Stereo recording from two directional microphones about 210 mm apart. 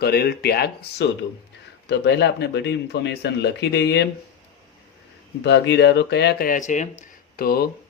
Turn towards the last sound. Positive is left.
turn(degrees=45)  # may be behind; listen again after turning